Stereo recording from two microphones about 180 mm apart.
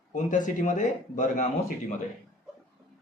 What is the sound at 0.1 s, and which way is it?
Speech, 45° left (ahead or behind).